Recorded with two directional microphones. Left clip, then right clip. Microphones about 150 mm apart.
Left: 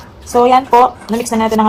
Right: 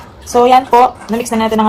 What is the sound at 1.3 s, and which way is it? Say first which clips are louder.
Speech: even; 5° right (ahead or behind).